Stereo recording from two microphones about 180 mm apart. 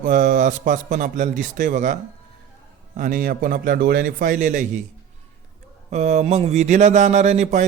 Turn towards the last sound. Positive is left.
turn(degrees=-40)  # may be behind; listen again after turning